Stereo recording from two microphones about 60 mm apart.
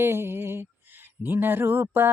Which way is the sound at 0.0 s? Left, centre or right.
Right.